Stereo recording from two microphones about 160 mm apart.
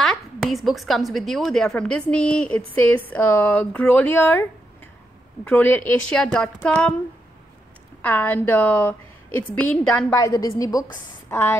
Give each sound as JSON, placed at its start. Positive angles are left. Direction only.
{"t": 0.0, "sound": "a woman's voice", "side_deg": 0}
{"t": 8.0, "sound": "a woman's voice", "side_deg": 10}
{"t": 10.1, "sound": "a woman's voice", "side_deg": 20}